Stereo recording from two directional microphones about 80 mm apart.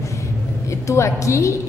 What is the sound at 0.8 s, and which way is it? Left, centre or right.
Speech, left.